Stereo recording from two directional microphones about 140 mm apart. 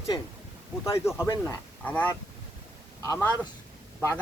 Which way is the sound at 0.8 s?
20° left (ahead or behind).